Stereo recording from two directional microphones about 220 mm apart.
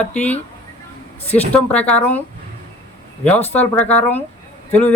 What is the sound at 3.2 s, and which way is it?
Speech, 5° left (ahead or behind).